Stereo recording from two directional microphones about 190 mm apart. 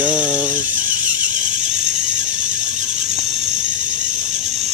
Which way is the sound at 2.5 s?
40° right (ahead or behind).